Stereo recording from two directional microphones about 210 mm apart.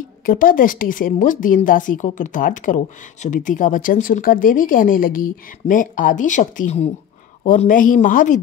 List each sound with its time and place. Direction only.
0.2 s a woman's voice: 40° left (ahead or behind)